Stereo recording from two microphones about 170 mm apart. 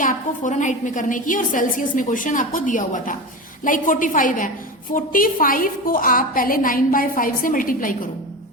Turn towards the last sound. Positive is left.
turn(degrees=55)  # may be behind; listen again after turning